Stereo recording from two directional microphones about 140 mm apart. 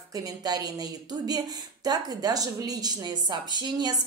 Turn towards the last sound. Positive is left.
turn(degrees=-30)  # may be behind; listen again after turning